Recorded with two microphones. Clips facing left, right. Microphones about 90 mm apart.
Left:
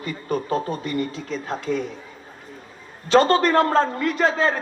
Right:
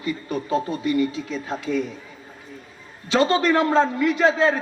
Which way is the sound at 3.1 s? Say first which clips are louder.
Left 2 dB; 50° left (ahead or behind).